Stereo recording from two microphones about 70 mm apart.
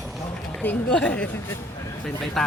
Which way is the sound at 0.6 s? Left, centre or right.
Centre.